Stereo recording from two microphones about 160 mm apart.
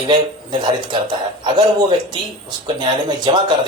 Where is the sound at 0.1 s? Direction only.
30° right (ahead or behind).